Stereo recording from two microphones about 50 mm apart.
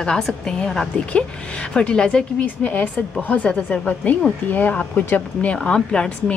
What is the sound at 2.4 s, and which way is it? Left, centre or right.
A woman's voice, left.